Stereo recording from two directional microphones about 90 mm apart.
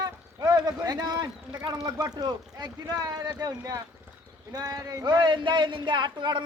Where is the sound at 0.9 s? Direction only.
45° right (ahead or behind).